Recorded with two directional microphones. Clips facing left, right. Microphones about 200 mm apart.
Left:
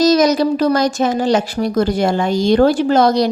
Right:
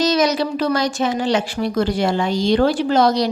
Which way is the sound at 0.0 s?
40° left (ahead or behind).